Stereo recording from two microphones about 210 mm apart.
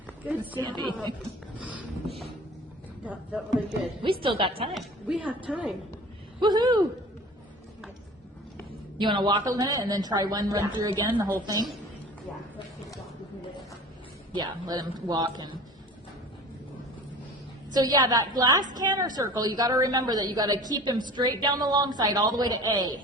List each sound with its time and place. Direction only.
0.6 s a woman's voice: 20° right (ahead or behind)
3.0 s a woman's voice: 5° right (ahead or behind)
4.0 s a woman's voice: 25° right (ahead or behind)
4.7 s a woman's voice: 5° right (ahead or behind)
6.4 s a woman's voice: 20° right (ahead or behind)
9.0 s a woman's voice: 20° right (ahead or behind)
14.3 s a woman's voice: 20° right (ahead or behind)
17.7 s a woman's voice: 20° right (ahead or behind)